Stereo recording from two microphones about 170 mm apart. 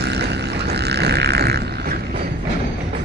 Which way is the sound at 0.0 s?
80° right.